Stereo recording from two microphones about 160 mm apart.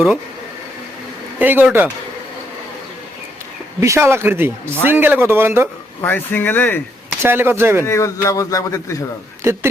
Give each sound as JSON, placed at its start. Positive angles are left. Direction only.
{"t": 1.4, "sound": "a man's voice", "side_deg": -10}
{"t": 3.8, "sound": "a man's voice", "side_deg": -20}
{"t": 6.0, "sound": "speech", "side_deg": 10}
{"t": 7.2, "sound": "a man's voice", "side_deg": -15}
{"t": 7.9, "sound": "a man's voice", "side_deg": 20}